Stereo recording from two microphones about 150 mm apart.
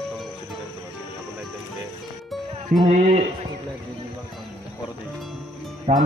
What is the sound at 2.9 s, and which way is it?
Speech, 50° right (ahead or behind).